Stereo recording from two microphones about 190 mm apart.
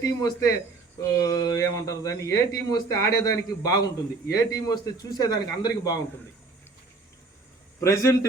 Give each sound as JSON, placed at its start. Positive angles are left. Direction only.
{"t": 0.0, "sound": "a man's voice", "side_deg": 20}
{"t": 7.9, "sound": "a man's voice", "side_deg": 15}